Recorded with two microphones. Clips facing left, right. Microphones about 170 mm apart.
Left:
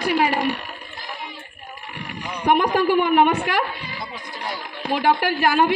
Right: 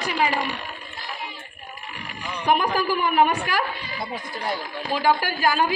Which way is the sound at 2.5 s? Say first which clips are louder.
Left 4 dB; 70° left (ahead or behind).